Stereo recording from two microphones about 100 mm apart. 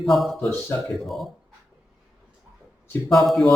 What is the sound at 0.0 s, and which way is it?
A man's voice, centre (ahead or behind).